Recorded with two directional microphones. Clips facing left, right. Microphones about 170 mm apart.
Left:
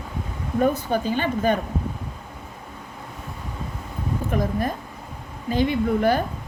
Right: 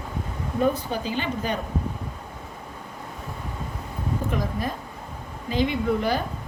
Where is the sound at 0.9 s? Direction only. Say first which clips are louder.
Left 5 dB; 50° left (ahead or behind).